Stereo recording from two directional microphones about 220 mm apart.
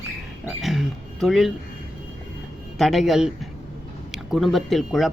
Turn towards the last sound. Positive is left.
turn(degrees=0)  # may be behind; listen again after turning